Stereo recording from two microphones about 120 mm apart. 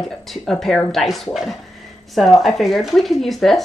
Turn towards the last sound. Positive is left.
turn(degrees=0)  # may be behind; listen again after turning